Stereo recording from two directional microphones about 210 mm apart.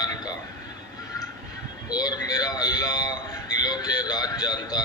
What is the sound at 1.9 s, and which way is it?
A man's voice, 20° left (ahead or behind).